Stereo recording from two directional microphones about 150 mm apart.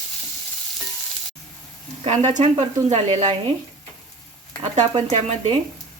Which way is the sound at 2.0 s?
45° right (ahead or behind).